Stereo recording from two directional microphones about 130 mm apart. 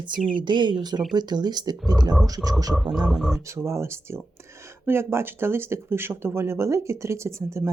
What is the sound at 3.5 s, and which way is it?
Speech, 20° right (ahead or behind).